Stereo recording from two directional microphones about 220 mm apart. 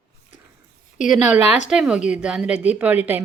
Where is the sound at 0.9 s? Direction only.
35° left (ahead or behind).